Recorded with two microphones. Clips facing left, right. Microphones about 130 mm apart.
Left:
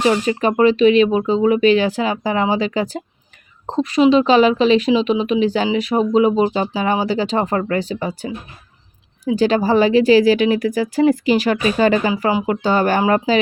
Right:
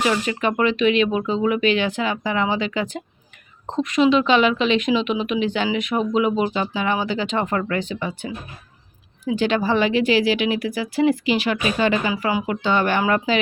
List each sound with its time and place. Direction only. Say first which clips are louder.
0.0 s speech: left 5 dB; 35° left (ahead or behind)
12.3 s speech: left 4 dB; 25° left (ahead or behind)
12.6 s speech: left 3 dB; 40° left (ahead or behind)